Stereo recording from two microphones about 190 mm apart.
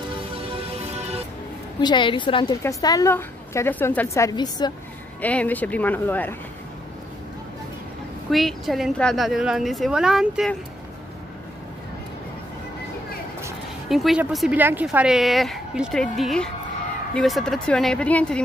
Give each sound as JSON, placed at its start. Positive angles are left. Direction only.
{"t": 0.5, "sound": "music", "side_deg": -30}
{"t": 1.8, "sound": "a woman's voice", "side_deg": 25}
{"t": 5.2, "sound": "a woman's voice", "side_deg": 10}
{"t": 8.3, "sound": "speech", "side_deg": 0}
{"t": 13.8, "sound": "speech", "side_deg": 0}